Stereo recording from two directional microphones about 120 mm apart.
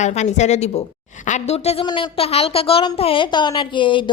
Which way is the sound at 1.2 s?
75° left (ahead or behind).